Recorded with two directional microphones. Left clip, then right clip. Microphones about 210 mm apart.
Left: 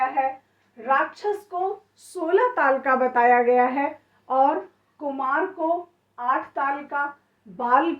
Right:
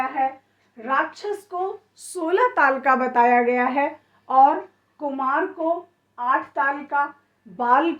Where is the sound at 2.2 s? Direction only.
45° right (ahead or behind).